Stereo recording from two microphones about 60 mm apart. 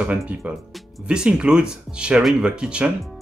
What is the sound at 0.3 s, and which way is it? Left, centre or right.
Speech, right.